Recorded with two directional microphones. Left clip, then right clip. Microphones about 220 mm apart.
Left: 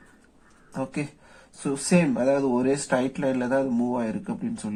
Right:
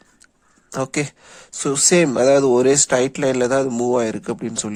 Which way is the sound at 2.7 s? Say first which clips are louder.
Right 8 dB; 45° right (ahead or behind).